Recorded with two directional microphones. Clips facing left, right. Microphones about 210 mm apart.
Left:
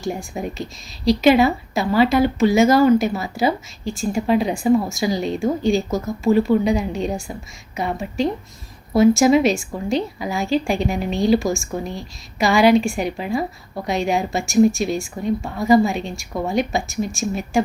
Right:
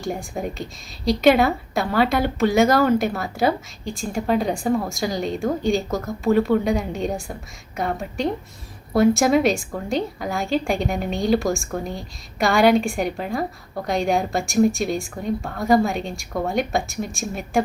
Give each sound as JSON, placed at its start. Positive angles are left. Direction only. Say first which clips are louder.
{"t": 0.0, "sound": "speech", "louder": "left 1 dB", "side_deg": 0}